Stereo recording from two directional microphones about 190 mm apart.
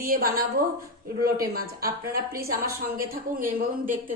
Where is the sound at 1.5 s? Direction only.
50° right (ahead or behind).